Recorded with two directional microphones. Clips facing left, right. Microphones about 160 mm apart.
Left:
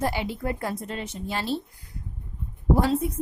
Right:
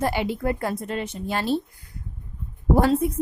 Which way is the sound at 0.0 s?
60° right (ahead or behind).